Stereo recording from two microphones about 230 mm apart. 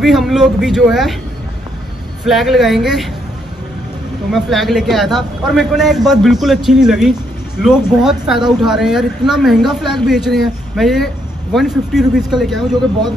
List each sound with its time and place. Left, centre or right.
0.0 s a man's voice: centre
2.2 s a man's voice: centre
4.3 s a man's voice: centre